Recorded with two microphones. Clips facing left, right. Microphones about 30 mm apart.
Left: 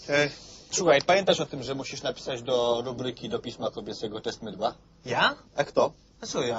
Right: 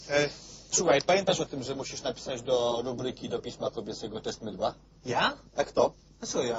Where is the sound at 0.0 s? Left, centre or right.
Centre.